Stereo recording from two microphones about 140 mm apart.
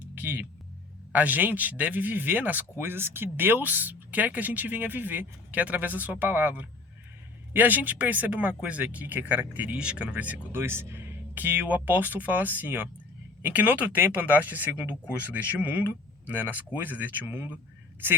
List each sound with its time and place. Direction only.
0.1 s music: 15° right (ahead or behind)
1.1 s speech: 10° right (ahead or behind)